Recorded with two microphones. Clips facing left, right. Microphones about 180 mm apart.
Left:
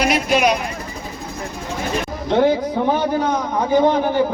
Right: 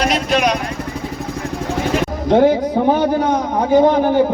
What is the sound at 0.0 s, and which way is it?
Speech, 5° left (ahead or behind).